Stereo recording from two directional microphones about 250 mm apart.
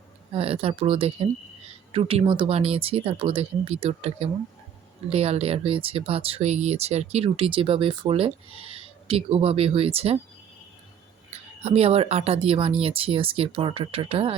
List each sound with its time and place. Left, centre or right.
0.3 s speech: right
11.6 s speech: right